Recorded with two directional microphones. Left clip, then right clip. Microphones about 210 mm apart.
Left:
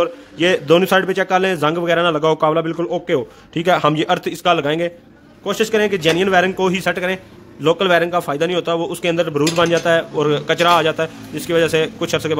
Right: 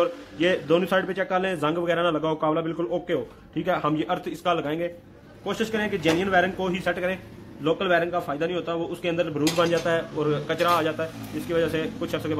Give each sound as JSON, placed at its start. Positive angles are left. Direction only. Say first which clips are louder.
{"t": 0.0, "sound": "a man's voice", "louder": "left 6 dB", "side_deg": 45}
{"t": 5.4, "sound": "a man's voice", "louder": "left 10 dB", "side_deg": 55}